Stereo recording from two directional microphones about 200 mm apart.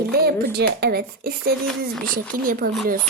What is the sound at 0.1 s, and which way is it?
Speech, 50° right (ahead or behind).